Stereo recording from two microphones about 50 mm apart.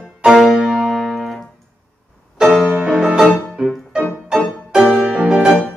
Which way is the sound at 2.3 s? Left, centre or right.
Centre.